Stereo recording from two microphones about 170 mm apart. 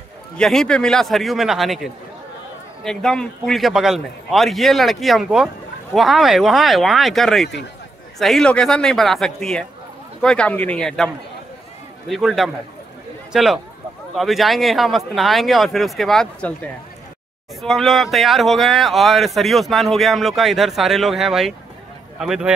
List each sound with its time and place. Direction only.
0.4 s speech: 5° left (ahead or behind)
12.1 s speech: centre (ahead or behind)